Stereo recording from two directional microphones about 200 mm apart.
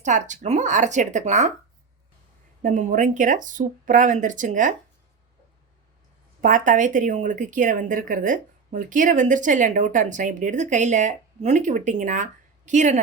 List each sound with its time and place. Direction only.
0.0 s speech: 35° right (ahead or behind)
2.6 s speech: 40° right (ahead or behind)
6.4 s speech: 40° right (ahead or behind)